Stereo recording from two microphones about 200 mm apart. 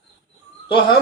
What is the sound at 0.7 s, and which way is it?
Speech, 25° left (ahead or behind).